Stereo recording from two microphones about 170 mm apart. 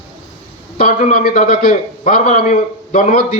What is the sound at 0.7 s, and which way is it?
A man's voice, 55° left (ahead or behind).